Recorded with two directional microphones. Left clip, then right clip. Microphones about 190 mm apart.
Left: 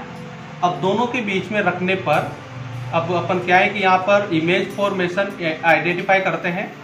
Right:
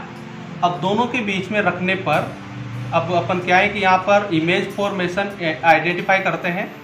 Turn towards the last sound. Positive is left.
turn(degrees=-10)  # may be behind; listen again after turning